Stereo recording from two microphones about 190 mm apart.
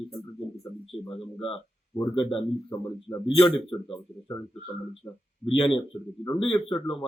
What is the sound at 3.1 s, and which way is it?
Speech, 20° left (ahead or behind).